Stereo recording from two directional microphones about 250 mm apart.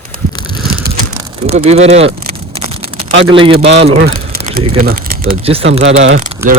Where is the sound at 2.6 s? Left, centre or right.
Right.